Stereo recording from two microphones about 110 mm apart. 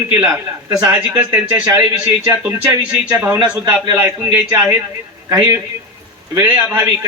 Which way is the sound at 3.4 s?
40° right (ahead or behind).